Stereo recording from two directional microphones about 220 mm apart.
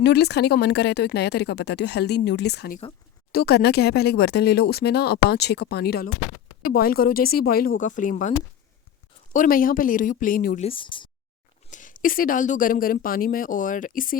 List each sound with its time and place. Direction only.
0.0 s a woman's voice: 50° left (ahead or behind)
9.3 s speech: 40° left (ahead or behind)
10.7 s speech: 25° left (ahead or behind)
11.7 s speech: 35° left (ahead or behind)